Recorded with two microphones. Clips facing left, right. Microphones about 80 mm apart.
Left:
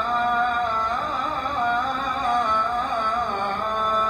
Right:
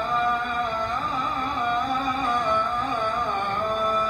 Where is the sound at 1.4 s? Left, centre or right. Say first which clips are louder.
Left 2 dB; left.